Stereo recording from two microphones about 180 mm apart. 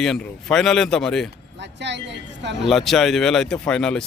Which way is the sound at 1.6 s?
75° right (ahead or behind).